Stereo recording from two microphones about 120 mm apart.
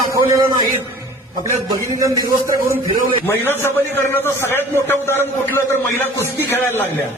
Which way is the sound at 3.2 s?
20° left (ahead or behind).